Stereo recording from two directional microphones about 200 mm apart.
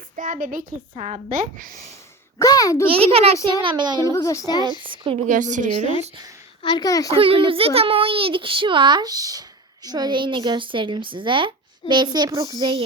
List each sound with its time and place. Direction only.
0.2 s a woman's voice: 40° right (ahead or behind)
2.4 s speech: 15° left (ahead or behind)
3.1 s a child's voice: 30° right (ahead or behind)
4.0 s speech: 15° left (ahead or behind)
4.8 s speech: 25° right (ahead or behind)
5.3 s a woman's voice: 40° right (ahead or behind)
6.6 s a child's voice: 20° left (ahead or behind)
7.1 s a child's voice: 25° right (ahead or behind)